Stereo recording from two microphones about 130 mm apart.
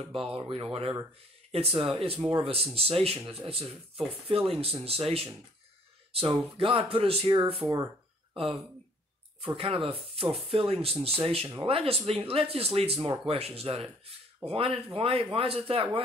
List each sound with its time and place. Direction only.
0.1 s speech: 45° right (ahead or behind)
7.6 s speech: 25° right (ahead or behind)
9.6 s speech: 45° right (ahead or behind)